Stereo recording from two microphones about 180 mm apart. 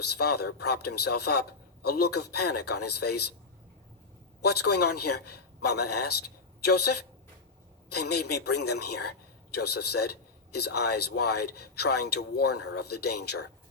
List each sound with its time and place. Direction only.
0.2 s a man's voice: 65° left (ahead or behind)
4.4 s a man's voice: 65° left (ahead or behind)